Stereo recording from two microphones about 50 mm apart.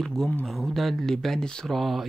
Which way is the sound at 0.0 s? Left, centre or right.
Centre.